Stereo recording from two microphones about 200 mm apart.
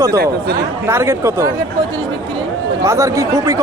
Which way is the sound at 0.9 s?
15° right (ahead or behind).